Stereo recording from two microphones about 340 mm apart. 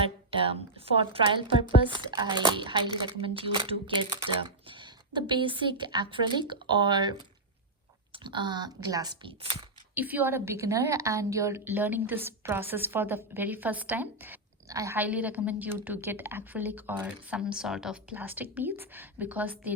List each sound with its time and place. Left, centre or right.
0.0 s a woman's voice: centre